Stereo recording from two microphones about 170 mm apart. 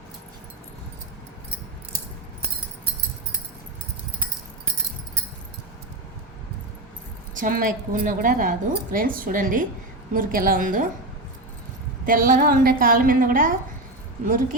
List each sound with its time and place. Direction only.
7.3 s a woman's voice: 55° right (ahead or behind)
12.0 s a woman's voice: 55° right (ahead or behind)